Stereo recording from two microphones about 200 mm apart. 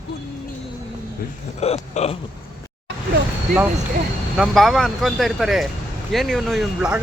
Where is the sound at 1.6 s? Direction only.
30° left (ahead or behind).